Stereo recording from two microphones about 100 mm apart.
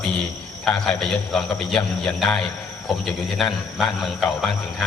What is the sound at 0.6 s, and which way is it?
A man's voice, 5° left (ahead or behind).